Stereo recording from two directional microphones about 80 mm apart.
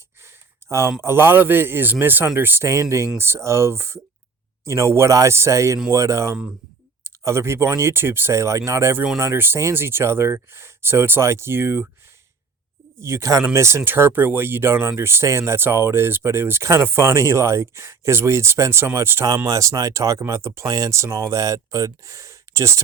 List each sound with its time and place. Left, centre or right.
0.2 s a sound: right
1.0 s speech: right
2.6 s speech: right
13.0 s speech: right
19.5 s speech: right